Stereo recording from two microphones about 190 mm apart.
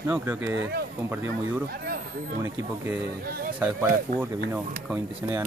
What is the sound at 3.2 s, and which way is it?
Speech, 50° right (ahead or behind).